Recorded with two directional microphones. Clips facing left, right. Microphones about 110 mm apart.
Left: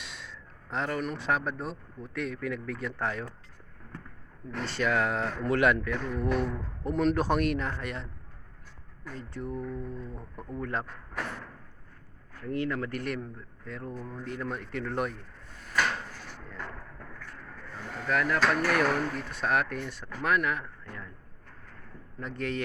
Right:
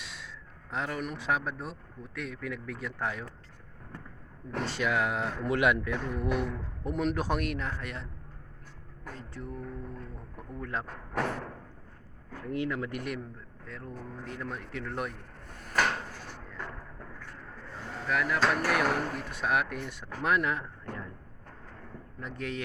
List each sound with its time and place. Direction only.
0.0 s speech: 5° right (ahead or behind)
4.6 s speech: 10° right (ahead or behind)
9.1 s speech: centre (ahead or behind)
12.5 s speech: 10° right (ahead or behind)
17.5 s a sound: 25° right (ahead or behind)
18.0 s speech: 5° right (ahead or behind); by 21.1 s 25° right (ahead or behind)
22.2 s speech: 5° right (ahead or behind)